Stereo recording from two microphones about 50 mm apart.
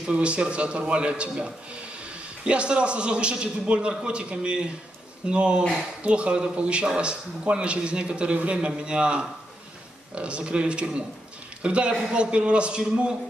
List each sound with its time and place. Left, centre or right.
0.0 s speech: right